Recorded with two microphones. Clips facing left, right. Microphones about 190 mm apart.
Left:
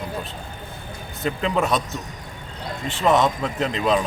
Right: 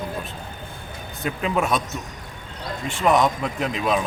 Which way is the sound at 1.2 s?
10° right (ahead or behind).